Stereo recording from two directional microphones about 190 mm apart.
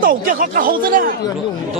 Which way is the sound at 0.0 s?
45° right (ahead or behind).